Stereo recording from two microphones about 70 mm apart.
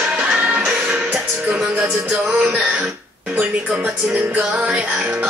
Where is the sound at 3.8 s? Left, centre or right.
Right.